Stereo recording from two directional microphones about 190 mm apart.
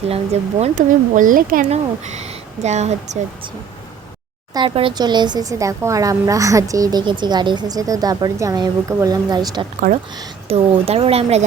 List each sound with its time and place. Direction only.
0.6 s speech: 40° right (ahead or behind)
4.5 s speech: 25° right (ahead or behind)
9.8 s speech: 50° right (ahead or behind)
10.5 s speech: 30° right (ahead or behind)